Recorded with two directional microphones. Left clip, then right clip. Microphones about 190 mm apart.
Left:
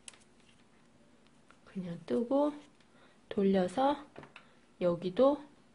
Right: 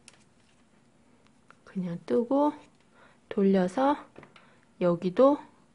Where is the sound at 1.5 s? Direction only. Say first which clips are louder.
Right 6 dB; 30° right (ahead or behind).